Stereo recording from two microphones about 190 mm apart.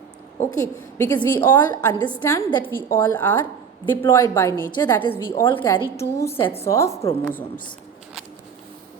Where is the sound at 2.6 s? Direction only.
10° left (ahead or behind).